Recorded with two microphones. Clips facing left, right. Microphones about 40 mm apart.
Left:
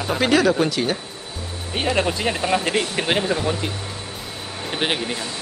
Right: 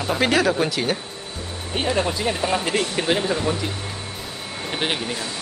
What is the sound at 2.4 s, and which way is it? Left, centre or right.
Speech, centre.